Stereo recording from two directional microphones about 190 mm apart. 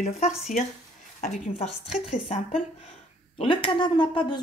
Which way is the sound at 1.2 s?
40° left (ahead or behind).